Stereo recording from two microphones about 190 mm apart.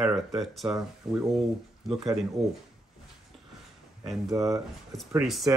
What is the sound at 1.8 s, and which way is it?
Speech, centre (ahead or behind).